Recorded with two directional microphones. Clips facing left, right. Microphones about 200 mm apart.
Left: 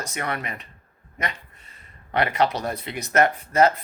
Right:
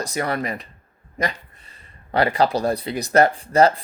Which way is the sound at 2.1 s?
30° right (ahead or behind).